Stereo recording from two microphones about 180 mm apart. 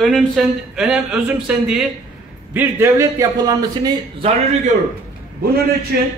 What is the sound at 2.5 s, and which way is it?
A man's voice, 15° right (ahead or behind).